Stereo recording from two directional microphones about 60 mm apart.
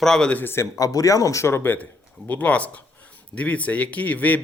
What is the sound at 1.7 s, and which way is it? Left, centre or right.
A man's voice, left.